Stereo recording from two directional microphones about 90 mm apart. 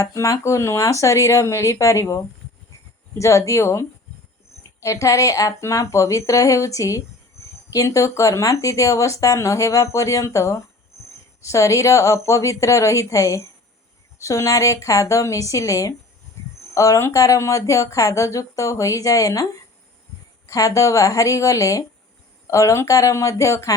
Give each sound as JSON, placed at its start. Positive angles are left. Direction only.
{"t": 0.2, "sound": "speech", "side_deg": 35}
{"t": 16.4, "sound": "a sound", "side_deg": 30}
{"t": 16.7, "sound": "speech", "side_deg": 35}
{"t": 20.5, "sound": "speech", "side_deg": 40}